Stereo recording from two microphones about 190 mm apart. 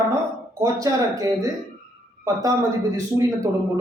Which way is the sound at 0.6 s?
15° right (ahead or behind).